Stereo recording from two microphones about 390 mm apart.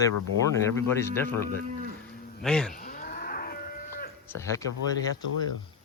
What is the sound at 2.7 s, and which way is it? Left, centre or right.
Moo, left.